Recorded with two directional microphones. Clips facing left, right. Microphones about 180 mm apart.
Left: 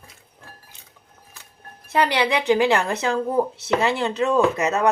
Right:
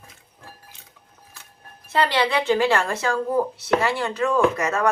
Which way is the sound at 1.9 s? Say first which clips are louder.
Left 1 dB; 15° left (ahead or behind).